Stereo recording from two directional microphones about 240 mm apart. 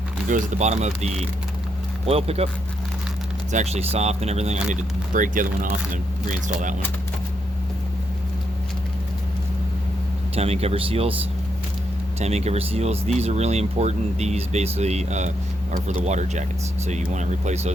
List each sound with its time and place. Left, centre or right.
0.3 s speech: right
3.5 s speech: right
10.3 s speech: right
12.2 s speech: right